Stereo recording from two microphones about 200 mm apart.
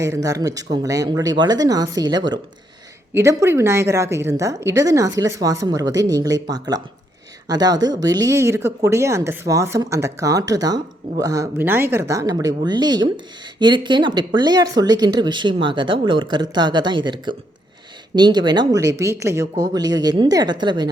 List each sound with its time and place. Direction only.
0.0 s a woman's voice: 15° right (ahead or behind)